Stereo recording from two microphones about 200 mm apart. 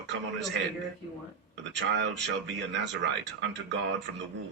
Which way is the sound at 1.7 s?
60° right (ahead or behind).